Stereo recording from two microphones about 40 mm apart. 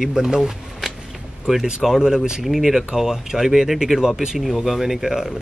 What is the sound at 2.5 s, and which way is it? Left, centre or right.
Speech, centre.